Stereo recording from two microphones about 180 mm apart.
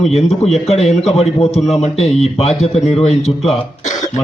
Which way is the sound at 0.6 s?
35° left (ahead or behind).